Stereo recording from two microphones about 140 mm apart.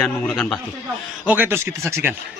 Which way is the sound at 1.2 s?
10° right (ahead or behind).